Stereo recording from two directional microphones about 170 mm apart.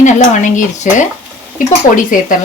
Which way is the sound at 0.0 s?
45° left (ahead or behind).